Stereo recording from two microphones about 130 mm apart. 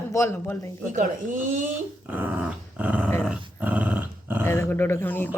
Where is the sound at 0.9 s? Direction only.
85° right.